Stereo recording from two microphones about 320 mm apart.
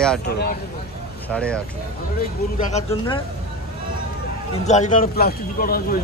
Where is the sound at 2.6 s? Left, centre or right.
Left.